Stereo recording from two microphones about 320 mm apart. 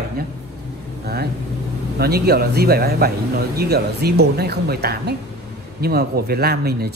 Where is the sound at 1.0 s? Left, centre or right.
Right.